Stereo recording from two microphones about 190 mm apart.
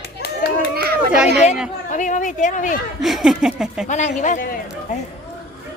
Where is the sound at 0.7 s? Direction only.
55° right (ahead or behind).